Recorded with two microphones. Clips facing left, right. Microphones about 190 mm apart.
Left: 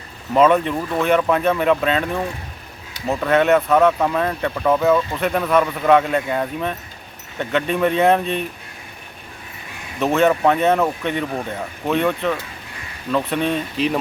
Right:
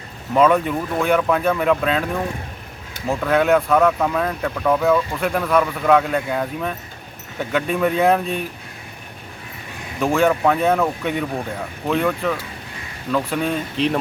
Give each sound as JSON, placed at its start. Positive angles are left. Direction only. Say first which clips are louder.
{"t": 0.3, "sound": "speech", "louder": "left 1 dB", "side_deg": 0}
{"t": 10.0, "sound": "speech", "louder": "left 1 dB", "side_deg": 0}